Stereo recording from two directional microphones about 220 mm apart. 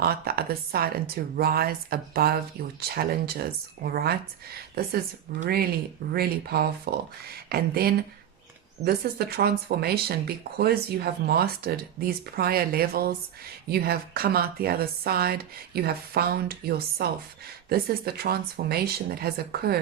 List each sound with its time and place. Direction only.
0.0 s speech: 45° right (ahead or behind)
5.4 s speech: 45° right (ahead or behind)